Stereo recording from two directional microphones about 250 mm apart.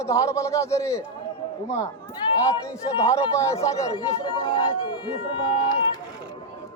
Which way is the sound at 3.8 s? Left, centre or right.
Centre.